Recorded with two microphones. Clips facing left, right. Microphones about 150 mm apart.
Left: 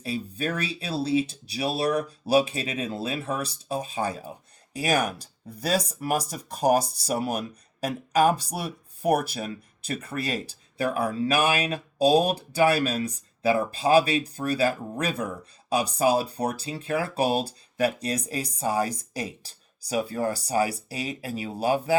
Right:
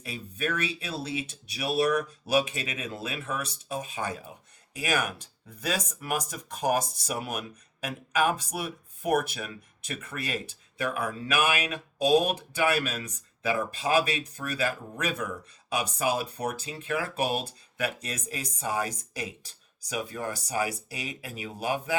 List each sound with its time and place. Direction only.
0.0 s speech: 30° left (ahead or behind)